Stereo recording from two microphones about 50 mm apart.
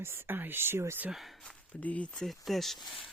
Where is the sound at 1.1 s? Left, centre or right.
Centre.